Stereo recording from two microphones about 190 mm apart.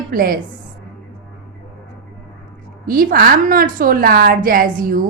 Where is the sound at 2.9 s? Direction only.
50° right (ahead or behind).